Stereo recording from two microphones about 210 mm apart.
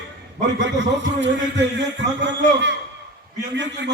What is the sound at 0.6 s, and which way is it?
A man's voice, 55° right (ahead or behind).